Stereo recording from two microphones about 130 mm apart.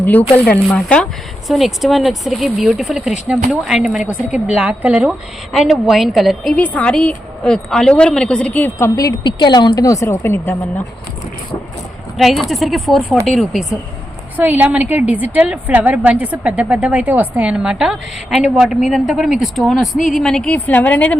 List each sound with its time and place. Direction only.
0.0 s a woman's voice: 15° left (ahead or behind)
9.0 s speech: 30° left (ahead or behind); by 10.8 s 15° left (ahead or behind)
12.1 s speech: centre (ahead or behind)
14.3 s a woman's voice: 15° right (ahead or behind); by 21.2 s 10° left (ahead or behind)